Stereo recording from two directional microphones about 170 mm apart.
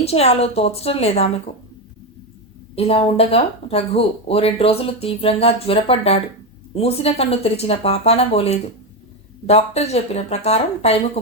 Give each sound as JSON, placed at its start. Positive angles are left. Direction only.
{"t": 0.0, "sound": "speech", "side_deg": 35}
{"t": 2.7, "sound": "speech", "side_deg": 35}